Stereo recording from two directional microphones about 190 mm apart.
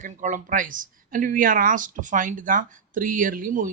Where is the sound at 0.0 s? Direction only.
40° right (ahead or behind).